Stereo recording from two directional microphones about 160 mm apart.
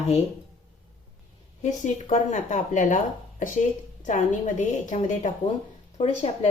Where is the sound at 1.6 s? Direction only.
50° left (ahead or behind).